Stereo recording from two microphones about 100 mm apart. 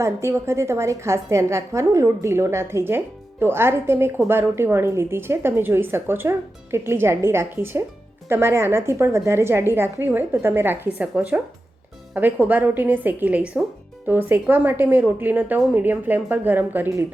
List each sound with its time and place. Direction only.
0.0 s a woman's voice: 30° right (ahead or behind)
12.1 s a woman's voice: 15° right (ahead or behind)